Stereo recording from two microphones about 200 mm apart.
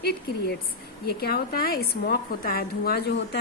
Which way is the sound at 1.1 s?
50° left (ahead or behind).